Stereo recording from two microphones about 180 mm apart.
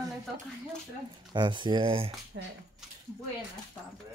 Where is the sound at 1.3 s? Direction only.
25° right (ahead or behind).